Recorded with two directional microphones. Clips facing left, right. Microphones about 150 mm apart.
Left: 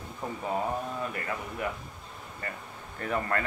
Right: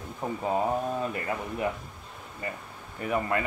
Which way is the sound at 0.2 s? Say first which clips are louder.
Right 4 dB; 20° right (ahead or behind).